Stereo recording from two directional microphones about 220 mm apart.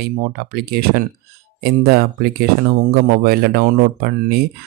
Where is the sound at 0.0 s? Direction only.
45° right (ahead or behind).